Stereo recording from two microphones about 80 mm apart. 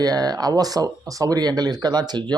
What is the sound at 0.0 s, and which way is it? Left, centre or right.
A man's voice, right.